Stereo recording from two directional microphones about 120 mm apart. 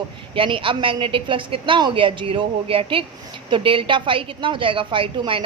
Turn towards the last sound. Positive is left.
turn(degrees=-45)  # may be behind; listen again after turning